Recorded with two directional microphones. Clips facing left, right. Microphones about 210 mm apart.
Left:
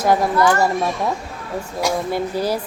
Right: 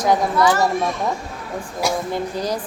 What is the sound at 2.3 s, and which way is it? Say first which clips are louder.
Speech: left 4 dB; 5° left (ahead or behind).